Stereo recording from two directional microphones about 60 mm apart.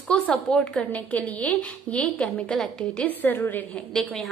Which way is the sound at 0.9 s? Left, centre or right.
Left.